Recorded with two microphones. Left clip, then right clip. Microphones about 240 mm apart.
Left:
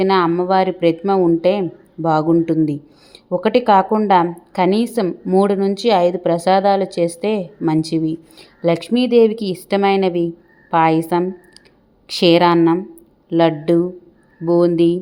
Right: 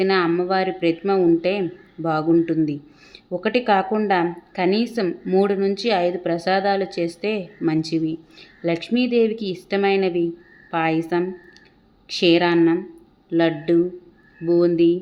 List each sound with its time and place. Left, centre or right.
0.0 s a woman's voice: centre